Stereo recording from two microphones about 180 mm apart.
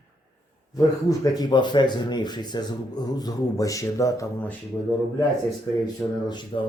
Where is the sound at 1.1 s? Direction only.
20° left (ahead or behind).